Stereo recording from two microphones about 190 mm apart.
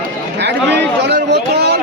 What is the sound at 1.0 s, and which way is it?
Speech, 60° right (ahead or behind).